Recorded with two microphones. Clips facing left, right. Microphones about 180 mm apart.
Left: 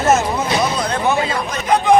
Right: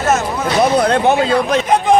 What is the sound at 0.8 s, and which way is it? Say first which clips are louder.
Speech: right 5 dB; 65° right (ahead or behind).